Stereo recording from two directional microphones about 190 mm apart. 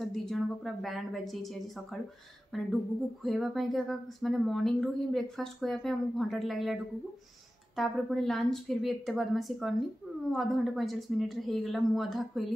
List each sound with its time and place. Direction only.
0.0 s speech: centre (ahead or behind)